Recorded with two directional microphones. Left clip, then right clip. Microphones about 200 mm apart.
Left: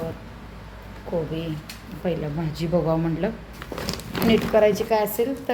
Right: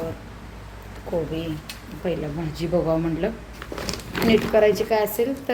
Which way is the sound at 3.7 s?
55° left (ahead or behind).